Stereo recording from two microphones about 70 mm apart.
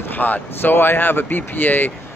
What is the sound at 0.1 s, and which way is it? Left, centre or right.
Speech, left.